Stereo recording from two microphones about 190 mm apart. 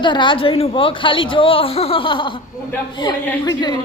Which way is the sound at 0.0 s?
25° left (ahead or behind).